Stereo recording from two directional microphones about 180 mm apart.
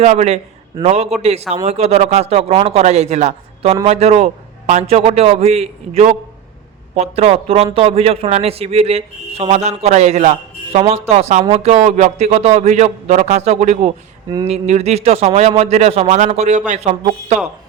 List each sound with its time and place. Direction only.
0.0 s a man's voice: 40° right (ahead or behind)